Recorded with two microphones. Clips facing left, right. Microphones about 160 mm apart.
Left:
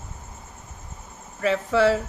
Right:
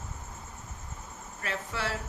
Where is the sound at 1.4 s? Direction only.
90° left.